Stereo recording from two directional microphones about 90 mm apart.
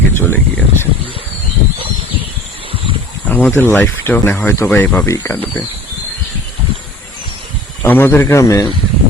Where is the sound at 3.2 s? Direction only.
20° left (ahead or behind).